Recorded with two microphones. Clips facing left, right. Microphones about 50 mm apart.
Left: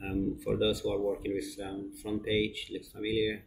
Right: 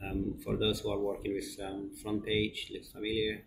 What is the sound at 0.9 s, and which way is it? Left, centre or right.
Speech, left.